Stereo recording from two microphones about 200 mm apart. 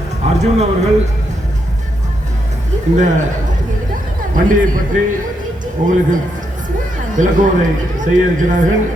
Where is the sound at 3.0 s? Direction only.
35° right (ahead or behind).